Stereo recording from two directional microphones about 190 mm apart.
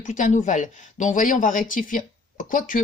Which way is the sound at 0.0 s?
40° left (ahead or behind).